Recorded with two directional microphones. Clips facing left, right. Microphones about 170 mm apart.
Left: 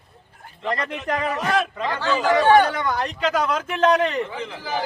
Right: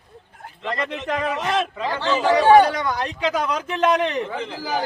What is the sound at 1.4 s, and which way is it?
Speech, 25° right (ahead or behind).